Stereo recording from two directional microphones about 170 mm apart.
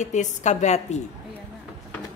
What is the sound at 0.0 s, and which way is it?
A woman's voice, 45° left (ahead or behind).